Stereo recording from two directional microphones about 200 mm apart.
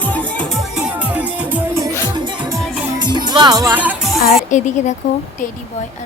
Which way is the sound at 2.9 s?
20° right (ahead or behind).